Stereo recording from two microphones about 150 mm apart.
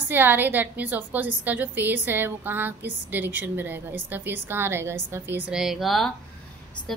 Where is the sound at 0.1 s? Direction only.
15° right (ahead or behind).